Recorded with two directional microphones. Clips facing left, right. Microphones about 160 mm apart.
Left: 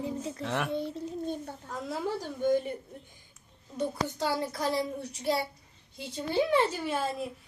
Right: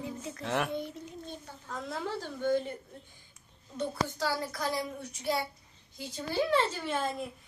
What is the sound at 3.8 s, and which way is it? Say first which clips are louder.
A woman's voice: left 2 dB; 20° left (ahead or behind).